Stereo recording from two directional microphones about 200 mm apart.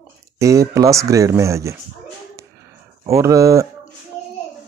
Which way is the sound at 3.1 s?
15° right (ahead or behind).